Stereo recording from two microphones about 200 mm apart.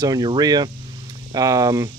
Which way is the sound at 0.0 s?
20° right (ahead or behind).